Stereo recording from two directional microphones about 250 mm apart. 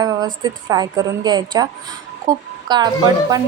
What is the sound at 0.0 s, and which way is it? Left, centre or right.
A woman's voice, centre.